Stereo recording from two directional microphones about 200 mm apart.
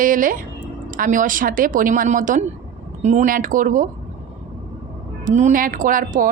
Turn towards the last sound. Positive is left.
turn(degrees=-40)  # may be behind; listen again after turning